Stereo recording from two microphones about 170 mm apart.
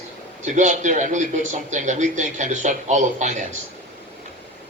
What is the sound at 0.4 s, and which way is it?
Speech, 45° right (ahead or behind).